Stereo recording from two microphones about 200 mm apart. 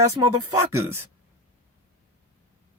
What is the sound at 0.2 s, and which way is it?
Speech, 15° right (ahead or behind).